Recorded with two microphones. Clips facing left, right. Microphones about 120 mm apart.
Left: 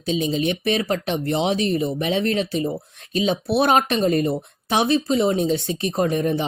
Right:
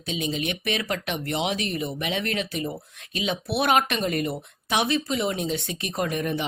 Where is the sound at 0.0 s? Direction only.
35° left (ahead or behind).